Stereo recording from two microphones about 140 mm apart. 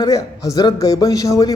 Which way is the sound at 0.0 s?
25° left (ahead or behind).